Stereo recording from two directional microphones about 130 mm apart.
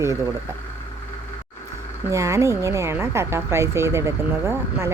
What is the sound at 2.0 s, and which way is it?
Speech, 25° right (ahead or behind).